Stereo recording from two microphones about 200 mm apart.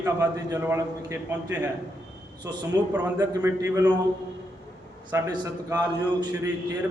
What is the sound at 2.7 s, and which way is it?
A man's voice, 15° right (ahead or behind).